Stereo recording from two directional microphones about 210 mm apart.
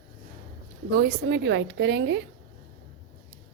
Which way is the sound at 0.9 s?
55° right (ahead or behind).